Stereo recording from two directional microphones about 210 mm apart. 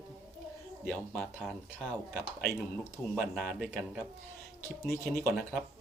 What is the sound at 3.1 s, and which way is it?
Speech, centre (ahead or behind).